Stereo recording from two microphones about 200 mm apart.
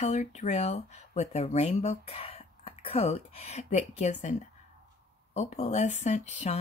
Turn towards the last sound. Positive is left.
turn(degrees=35)  # may be behind; listen again after turning